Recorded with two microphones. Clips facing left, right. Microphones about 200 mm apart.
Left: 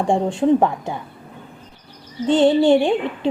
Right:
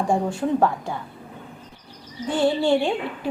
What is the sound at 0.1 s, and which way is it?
Speech, 25° left (ahead or behind).